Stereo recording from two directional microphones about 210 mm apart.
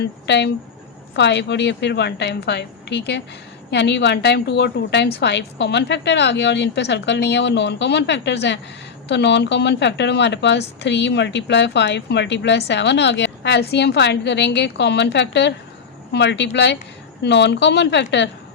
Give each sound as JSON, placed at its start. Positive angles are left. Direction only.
{"t": 0.0, "sound": "speech", "side_deg": 55}